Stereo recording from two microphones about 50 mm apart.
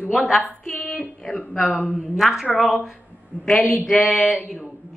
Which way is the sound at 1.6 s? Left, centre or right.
Left.